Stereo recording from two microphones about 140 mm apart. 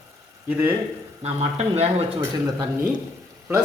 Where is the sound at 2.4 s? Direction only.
25° right (ahead or behind).